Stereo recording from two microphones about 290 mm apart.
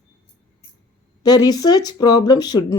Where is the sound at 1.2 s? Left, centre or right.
Centre.